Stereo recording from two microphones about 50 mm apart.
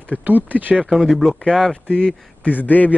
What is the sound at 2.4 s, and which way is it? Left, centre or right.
Speech, left.